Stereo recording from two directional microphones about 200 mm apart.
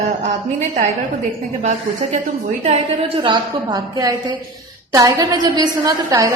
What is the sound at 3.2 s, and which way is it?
A woman's voice, 25° right (ahead or behind).